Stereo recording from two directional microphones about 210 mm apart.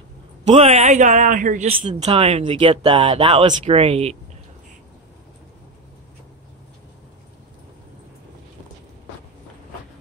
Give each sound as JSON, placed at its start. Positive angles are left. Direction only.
{"t": 0.5, "sound": "speech", "side_deg": -30}